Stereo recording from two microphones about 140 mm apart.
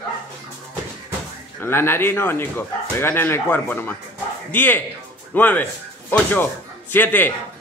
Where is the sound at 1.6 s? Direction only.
15° left (ahead or behind).